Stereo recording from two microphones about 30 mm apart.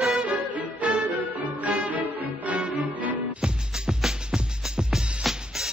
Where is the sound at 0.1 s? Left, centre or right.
Right.